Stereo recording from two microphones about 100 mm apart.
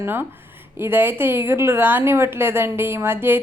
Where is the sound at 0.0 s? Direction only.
20° right (ahead or behind).